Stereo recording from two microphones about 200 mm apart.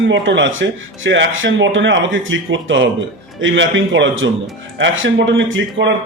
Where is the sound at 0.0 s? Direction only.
65° right (ahead or behind).